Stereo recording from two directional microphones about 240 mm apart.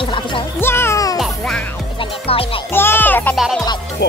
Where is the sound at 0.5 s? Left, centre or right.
Centre.